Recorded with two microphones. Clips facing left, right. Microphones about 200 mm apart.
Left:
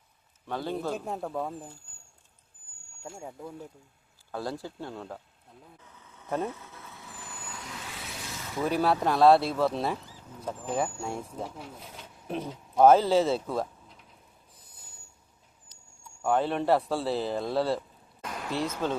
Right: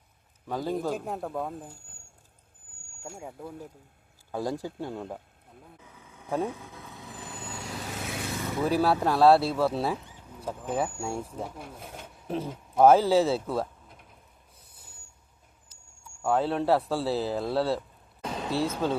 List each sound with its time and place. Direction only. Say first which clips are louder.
0.4 s speech: right 2 dB; 10° right (ahead or behind)
3.0 s speech: even; centre (ahead or behind)
4.3 s speech: right 3 dB; 15° right (ahead or behind)
5.8 s vehicle: right 3 dB; 10° right (ahead or behind); by 8.3 s 55° right (ahead or behind)
8.6 s speech: right 1 dB; 5° right (ahead or behind)
10.1 s a sound: even; 5° right (ahead or behind)
11.0 s speech: right 2 dB; 10° right (ahead or behind)
11.8 s a sound: right 3 dB; 55° right (ahead or behind)
12.3 s speech: right 2 dB; 5° right (ahead or behind)
13.8 s a sound: right 1 dB; 55° right (ahead or behind)
16.2 s speech: right 1 dB; 5° right (ahead or behind)
18.2 s a sound: right 4 dB; 25° right (ahead or behind)
18.5 s speech: right 2 dB; 10° right (ahead or behind)